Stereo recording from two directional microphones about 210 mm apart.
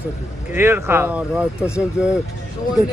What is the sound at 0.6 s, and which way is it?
A man's voice, 10° right (ahead or behind).